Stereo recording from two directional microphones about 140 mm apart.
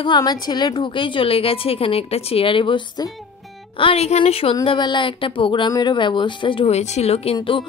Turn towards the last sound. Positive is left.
turn(degrees=40)  # may be behind; listen again after turning